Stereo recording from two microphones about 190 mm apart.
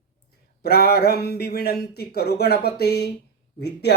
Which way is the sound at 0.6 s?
55° left (ahead or behind).